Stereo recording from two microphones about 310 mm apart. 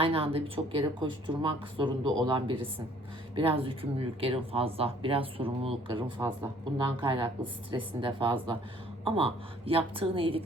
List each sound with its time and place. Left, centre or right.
0.0 s speech: centre